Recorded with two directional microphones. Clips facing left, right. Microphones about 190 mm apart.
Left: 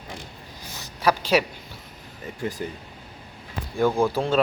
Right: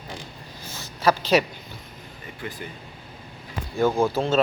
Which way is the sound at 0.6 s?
15° left (ahead or behind).